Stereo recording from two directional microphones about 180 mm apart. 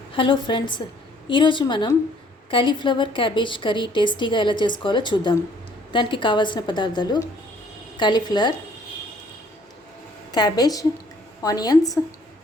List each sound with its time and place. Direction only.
0.1 s a woman's voice: 25° left (ahead or behind)
10.3 s a woman's voice: 25° left (ahead or behind)